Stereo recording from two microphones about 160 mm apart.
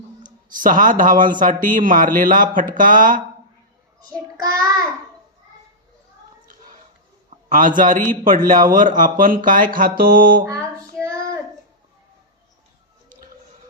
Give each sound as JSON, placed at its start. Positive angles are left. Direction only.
{"t": 0.2, "sound": "speech", "side_deg": -55}
{"t": 4.5, "sound": "a child's voice", "side_deg": -25}
{"t": 7.8, "sound": "speech", "side_deg": -55}
{"t": 10.4, "sound": "child singing", "side_deg": -20}